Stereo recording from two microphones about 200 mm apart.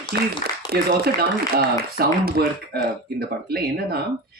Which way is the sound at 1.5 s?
50° right (ahead or behind).